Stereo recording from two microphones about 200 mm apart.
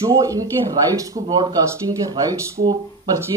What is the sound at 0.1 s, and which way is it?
Speech, 15° right (ahead or behind).